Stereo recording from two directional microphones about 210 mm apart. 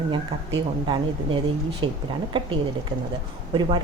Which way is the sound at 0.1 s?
25° right (ahead or behind).